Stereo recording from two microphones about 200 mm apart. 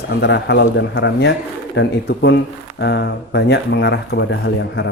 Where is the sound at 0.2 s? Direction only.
60° left (ahead or behind).